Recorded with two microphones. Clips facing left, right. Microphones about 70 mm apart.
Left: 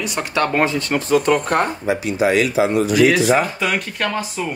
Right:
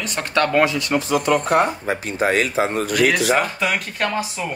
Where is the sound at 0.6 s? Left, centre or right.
Left.